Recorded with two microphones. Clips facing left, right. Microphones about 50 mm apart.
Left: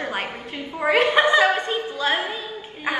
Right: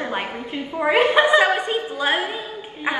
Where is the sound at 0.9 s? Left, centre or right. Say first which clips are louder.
Right 1 dB; right.